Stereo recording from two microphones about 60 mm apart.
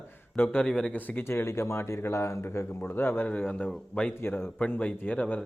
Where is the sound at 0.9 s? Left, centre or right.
Left.